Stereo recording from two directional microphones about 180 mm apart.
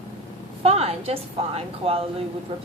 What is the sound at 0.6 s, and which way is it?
A woman's voice, 35° right (ahead or behind).